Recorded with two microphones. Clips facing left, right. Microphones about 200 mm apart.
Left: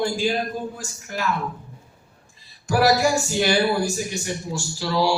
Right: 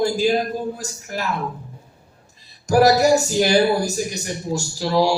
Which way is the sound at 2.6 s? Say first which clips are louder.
Right 4 dB; 40° right (ahead or behind).